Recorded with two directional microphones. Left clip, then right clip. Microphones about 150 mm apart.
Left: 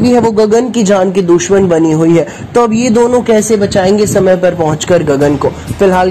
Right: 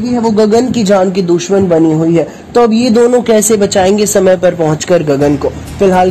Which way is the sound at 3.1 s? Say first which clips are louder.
Even; 25° right (ahead or behind).